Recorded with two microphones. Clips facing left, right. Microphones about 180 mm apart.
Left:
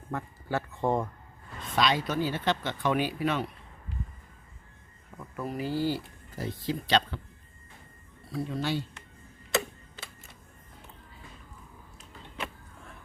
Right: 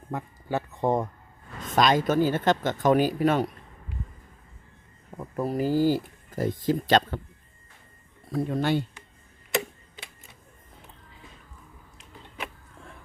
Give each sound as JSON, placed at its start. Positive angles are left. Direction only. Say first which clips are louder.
{"t": 0.1, "sound": "speech", "louder": "right 2 dB", "side_deg": -15}
{"t": 1.6, "sound": "speech", "louder": "right 6 dB", "side_deg": -45}
{"t": 5.1, "sound": "speech", "louder": "right 7 dB", "side_deg": -35}
{"t": 8.3, "sound": "speech", "louder": "right 6 dB", "side_deg": -50}
{"t": 9.5, "sound": "tick-tock", "louder": "right 1 dB", "side_deg": -15}